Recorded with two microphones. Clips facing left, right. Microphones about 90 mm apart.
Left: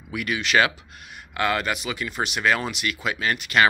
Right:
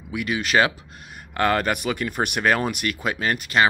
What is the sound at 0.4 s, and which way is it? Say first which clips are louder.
Speech: right 1 dB; 35° right (ahead or behind).